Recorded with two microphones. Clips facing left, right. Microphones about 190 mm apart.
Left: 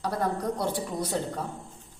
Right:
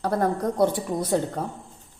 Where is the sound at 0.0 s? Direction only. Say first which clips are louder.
Right 5 dB; 50° right (ahead or behind).